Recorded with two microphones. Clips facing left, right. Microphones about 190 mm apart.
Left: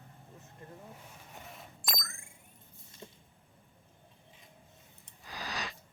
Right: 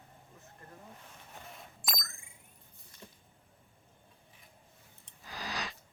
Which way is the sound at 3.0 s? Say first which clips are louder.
Left 4 dB; 25° left (ahead or behind).